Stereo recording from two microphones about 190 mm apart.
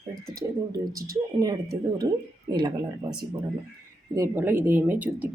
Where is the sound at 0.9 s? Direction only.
50° right (ahead or behind).